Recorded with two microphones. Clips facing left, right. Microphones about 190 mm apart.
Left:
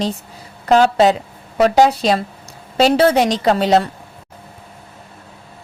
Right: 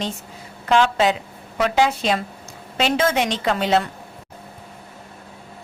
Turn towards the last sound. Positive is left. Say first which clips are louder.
# left 5 dB
turn(degrees=35)  # may be behind; listen again after turning